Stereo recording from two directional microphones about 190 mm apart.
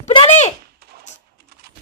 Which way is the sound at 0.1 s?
30° left (ahead or behind).